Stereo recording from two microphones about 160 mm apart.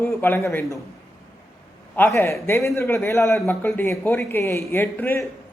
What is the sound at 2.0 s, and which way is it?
A man's voice, 15° left (ahead or behind).